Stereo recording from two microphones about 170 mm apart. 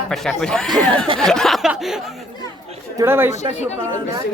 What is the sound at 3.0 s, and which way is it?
Speech, 15° right (ahead or behind).